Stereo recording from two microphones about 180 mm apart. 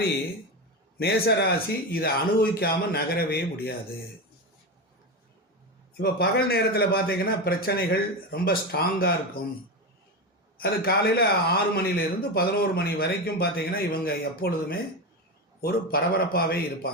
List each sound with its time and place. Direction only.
0.9 s a man's voice: 60° left (ahead or behind)
6.0 s a man's voice: 60° left (ahead or behind)
10.6 s a man's voice: 60° left (ahead or behind)